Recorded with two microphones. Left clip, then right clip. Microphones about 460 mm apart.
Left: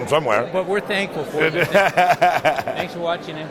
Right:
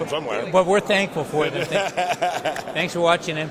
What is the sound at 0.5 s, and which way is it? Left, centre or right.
Speech, right.